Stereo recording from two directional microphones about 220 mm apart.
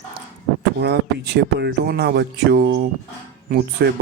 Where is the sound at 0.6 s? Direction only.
50° right (ahead or behind).